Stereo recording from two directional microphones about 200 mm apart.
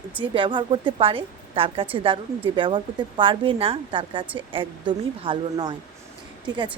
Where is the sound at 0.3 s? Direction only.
25° right (ahead or behind).